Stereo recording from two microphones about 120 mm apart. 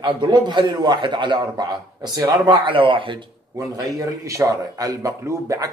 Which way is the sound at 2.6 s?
45° right (ahead or behind).